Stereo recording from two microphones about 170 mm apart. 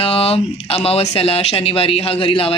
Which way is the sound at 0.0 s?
35° left (ahead or behind).